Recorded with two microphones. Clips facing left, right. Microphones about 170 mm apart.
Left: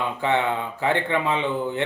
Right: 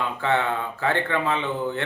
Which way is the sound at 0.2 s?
15° left (ahead or behind).